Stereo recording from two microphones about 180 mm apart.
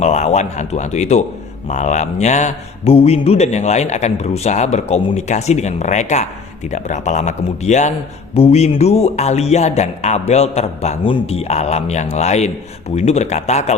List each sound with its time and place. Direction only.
0.0 s a man's voice: 40° left (ahead or behind)